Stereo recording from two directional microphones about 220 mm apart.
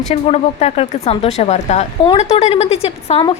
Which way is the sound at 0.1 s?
30° left (ahead or behind).